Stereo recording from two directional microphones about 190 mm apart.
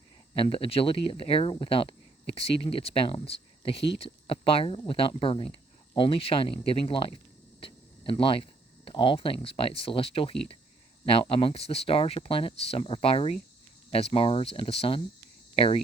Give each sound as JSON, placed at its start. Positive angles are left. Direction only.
{"t": 0.3, "sound": "speech", "side_deg": 30}